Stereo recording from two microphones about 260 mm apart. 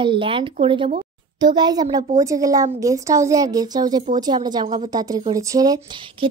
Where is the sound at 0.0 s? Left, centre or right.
Centre.